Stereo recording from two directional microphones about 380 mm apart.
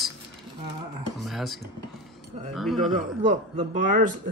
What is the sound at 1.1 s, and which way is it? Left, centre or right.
Speech, centre.